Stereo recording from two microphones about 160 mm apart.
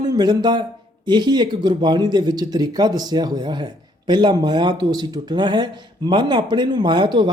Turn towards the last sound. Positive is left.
turn(degrees=-30)  # may be behind; listen again after turning